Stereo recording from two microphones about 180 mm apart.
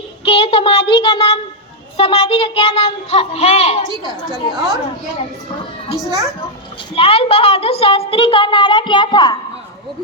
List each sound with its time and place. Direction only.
0.3 s a woman's voice: 35° left (ahead or behind)
3.8 s a woman's voice: 25° right (ahead or behind)
6.9 s a woman's voice: 30° left (ahead or behind)